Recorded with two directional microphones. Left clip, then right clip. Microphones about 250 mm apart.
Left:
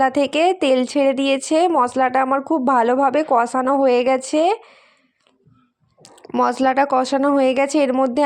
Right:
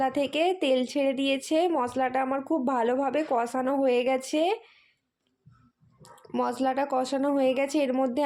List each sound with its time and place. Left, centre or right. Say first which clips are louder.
0.0 s speech: left 9 dB; centre
6.0 s speech: left 10 dB; centre